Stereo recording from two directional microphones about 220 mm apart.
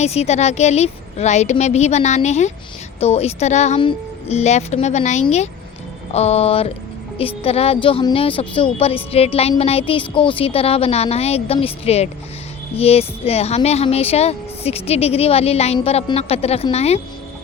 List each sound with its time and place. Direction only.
0.0 s a woman's voice: 30° left (ahead or behind)